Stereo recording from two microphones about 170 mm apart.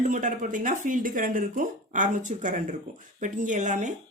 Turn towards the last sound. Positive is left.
turn(degrees=-45)  # may be behind; listen again after turning